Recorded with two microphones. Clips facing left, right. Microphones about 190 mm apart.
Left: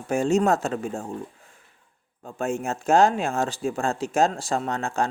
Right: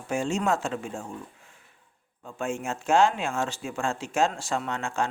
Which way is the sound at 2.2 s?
40° left (ahead or behind).